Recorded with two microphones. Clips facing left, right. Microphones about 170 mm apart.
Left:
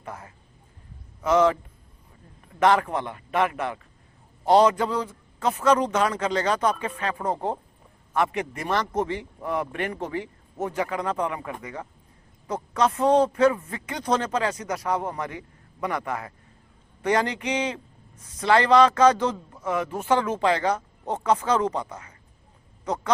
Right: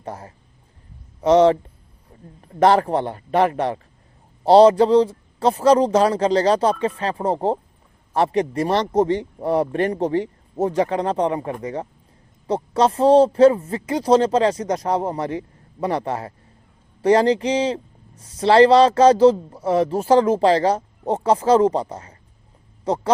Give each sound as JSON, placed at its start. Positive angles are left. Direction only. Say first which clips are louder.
{"t": 0.0, "sound": "a man's voice", "louder": "right 6 dB", "side_deg": -30}